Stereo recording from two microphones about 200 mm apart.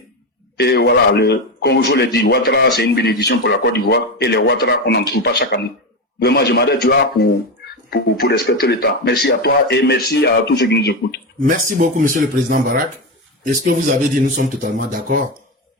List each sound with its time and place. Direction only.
0.5 s speech: 55° left (ahead or behind)
11.4 s speech: 45° right (ahead or behind)